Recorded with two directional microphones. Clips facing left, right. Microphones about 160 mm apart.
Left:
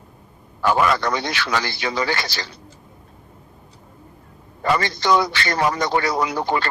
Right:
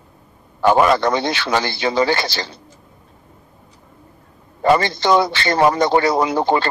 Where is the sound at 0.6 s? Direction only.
30° right (ahead or behind).